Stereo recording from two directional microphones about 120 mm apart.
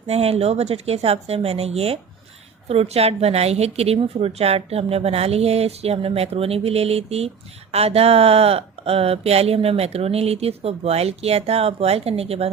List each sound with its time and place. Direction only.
0.1 s speech: 60° right (ahead or behind)